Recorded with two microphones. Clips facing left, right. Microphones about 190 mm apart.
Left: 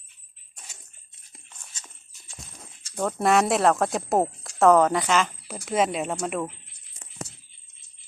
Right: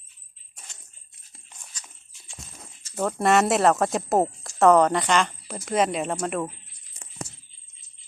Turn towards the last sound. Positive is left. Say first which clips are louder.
# right 1 dB
turn(degrees=0)  # may be behind; listen again after turning